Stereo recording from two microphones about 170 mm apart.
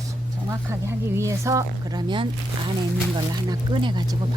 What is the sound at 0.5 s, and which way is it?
Speech, 15° right (ahead or behind).